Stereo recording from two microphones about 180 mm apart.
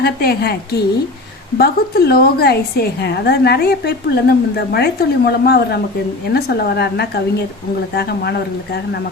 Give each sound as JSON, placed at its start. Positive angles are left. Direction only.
{"t": 0.0, "sound": "a woman's voice", "side_deg": 60}